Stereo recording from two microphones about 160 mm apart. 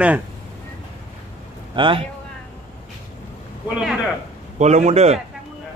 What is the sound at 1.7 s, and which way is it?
Speech, 30° right (ahead or behind).